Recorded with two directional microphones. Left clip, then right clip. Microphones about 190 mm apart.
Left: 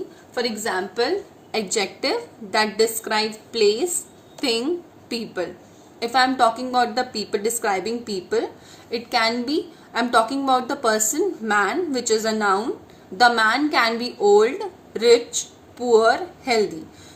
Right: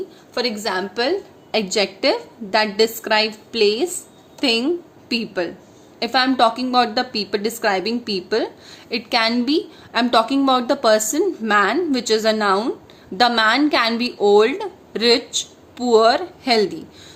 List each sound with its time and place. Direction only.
0.3 s a woman's voice: 50° right (ahead or behind)